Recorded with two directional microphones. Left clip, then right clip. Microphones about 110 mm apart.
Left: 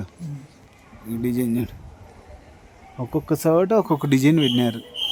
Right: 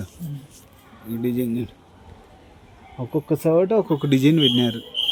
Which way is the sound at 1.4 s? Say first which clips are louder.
Left 2 dB; 25° left (ahead or behind).